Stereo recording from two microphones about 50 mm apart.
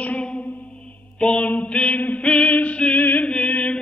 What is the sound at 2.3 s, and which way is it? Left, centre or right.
Music, left.